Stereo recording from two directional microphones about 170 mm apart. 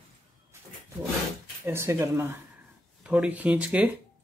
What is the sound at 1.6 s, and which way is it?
Speech, 15° right (ahead or behind).